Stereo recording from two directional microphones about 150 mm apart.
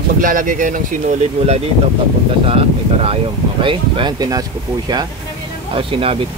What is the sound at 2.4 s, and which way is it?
Speech, 40° right (ahead or behind).